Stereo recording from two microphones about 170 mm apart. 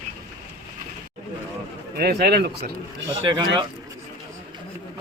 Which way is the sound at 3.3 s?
30° right (ahead or behind).